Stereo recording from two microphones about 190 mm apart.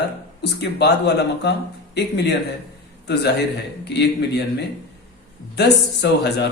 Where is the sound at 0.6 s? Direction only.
60° left (ahead or behind).